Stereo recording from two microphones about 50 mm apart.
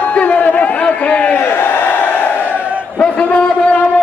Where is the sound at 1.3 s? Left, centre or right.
Left.